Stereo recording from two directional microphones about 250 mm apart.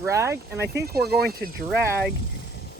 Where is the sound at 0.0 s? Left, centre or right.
Centre.